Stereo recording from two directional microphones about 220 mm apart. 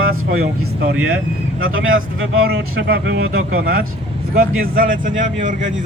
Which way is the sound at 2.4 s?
50° right (ahead or behind).